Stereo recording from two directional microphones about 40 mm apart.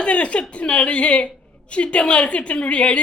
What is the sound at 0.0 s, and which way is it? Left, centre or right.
A woman's voice, left.